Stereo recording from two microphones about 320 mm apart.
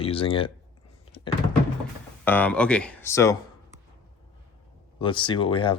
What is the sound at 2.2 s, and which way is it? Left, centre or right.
Speech, centre.